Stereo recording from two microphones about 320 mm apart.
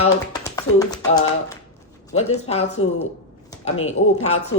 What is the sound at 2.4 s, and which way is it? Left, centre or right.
Speech, centre.